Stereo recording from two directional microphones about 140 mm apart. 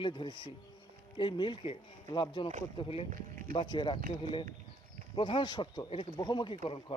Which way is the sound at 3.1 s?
90° right.